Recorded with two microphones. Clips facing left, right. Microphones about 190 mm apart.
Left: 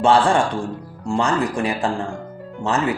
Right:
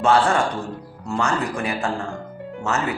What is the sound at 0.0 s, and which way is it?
Speech, 30° left (ahead or behind).